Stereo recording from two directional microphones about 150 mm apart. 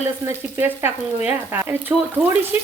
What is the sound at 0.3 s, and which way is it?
Frying, 15° right (ahead or behind).